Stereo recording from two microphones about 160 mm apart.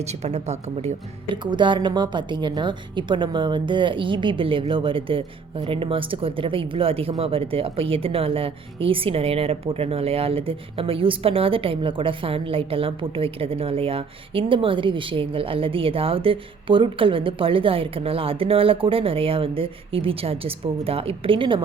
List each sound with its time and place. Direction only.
0.0 s a woman's voice: 45° right (ahead or behind)
1.3 s speech: 30° right (ahead or behind)